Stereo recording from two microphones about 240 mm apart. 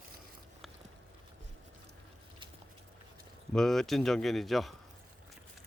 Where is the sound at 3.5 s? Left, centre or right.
Centre.